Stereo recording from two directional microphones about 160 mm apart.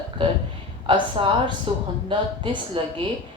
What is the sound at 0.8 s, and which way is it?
A woman's voice, 30° right (ahead or behind).